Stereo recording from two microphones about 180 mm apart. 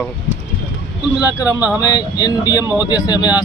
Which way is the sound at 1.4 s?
10° right (ahead or behind).